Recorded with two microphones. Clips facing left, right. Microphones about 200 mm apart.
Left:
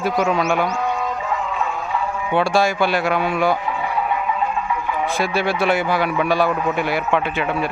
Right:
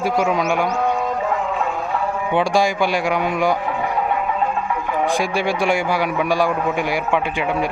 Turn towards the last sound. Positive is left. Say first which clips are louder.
# right 1 dB
turn(degrees=-15)  # may be behind; listen again after turning